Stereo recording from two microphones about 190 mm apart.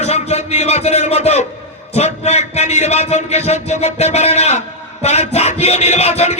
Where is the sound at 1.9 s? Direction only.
35° left (ahead or behind).